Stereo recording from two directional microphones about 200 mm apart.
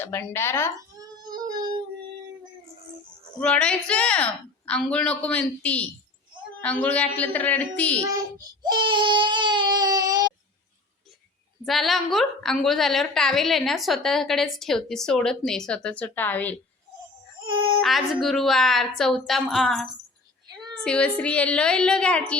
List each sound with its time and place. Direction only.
0.0 s a woman's voice: 10° left (ahead or behind)
0.9 s child singing: 20° right (ahead or behind)
3.4 s a woman's voice: 5° left (ahead or behind)
8.6 s baby cry: 25° right (ahead or behind)
11.6 s a woman's voice: centre (ahead or behind)
17.4 s child singing: 25° right (ahead or behind)
17.7 s a woman's voice: centre (ahead or behind)
20.5 s a sound: 20° right (ahead or behind)
20.8 s a woman's voice: 5° left (ahead or behind)